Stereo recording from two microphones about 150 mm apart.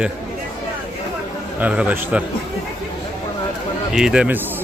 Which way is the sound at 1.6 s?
10° right (ahead or behind).